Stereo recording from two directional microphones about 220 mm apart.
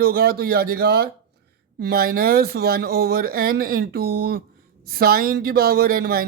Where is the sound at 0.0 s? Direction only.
45° right (ahead or behind).